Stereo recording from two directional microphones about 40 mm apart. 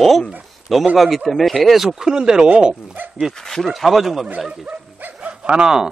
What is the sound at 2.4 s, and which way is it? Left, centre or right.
Speech, right.